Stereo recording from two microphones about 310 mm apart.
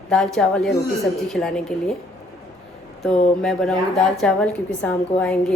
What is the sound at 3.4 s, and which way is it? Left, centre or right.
A woman's voice, centre.